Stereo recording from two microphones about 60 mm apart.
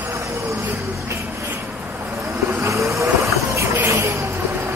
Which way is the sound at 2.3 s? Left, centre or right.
Right.